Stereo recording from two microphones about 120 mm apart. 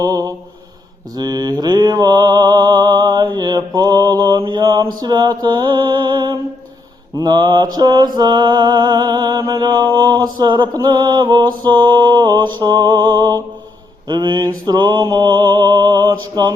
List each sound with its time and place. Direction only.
0.0 s mantra: 30° right (ahead or behind)
4.6 s mantra: 30° right (ahead or behind)